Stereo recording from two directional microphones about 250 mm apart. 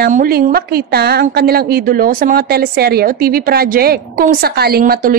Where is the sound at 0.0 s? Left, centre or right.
Right.